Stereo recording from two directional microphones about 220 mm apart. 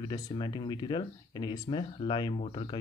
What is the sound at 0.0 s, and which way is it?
Speech, 20° left (ahead or behind).